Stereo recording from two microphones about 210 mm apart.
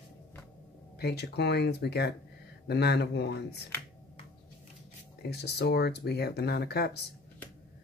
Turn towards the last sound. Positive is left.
turn(degrees=50)  # may be behind; listen again after turning